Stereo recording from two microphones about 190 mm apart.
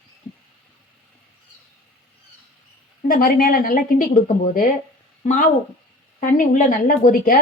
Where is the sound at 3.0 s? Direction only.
50° left (ahead or behind).